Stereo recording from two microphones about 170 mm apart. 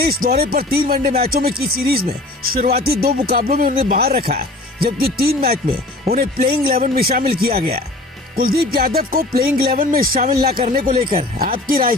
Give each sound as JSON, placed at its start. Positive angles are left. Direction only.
{"t": 0.0, "sound": "speech", "side_deg": -65}